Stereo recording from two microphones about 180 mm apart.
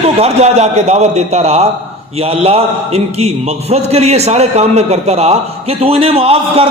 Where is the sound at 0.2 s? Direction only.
35° right (ahead or behind).